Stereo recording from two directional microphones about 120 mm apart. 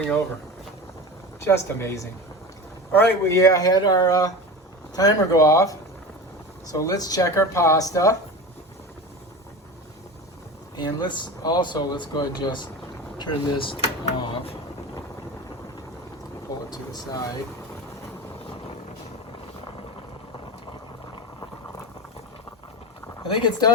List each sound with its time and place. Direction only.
1.4 s speech: 20° left (ahead or behind)
3.3 s speech: 30° left (ahead or behind)
10.8 s speech: 35° left (ahead or behind)
16.6 s speech: 35° left (ahead or behind)
23.2 s speech: 40° left (ahead or behind)